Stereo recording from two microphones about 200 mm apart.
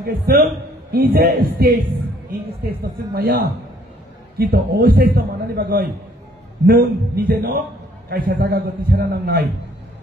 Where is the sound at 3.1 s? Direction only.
50° right (ahead or behind).